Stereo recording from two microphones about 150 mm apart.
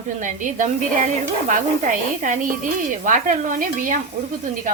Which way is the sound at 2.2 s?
60° right (ahead or behind).